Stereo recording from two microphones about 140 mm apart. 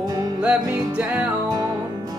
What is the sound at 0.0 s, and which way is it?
Music, 30° right (ahead or behind).